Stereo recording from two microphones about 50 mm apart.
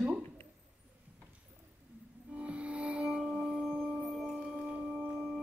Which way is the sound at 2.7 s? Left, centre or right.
Right.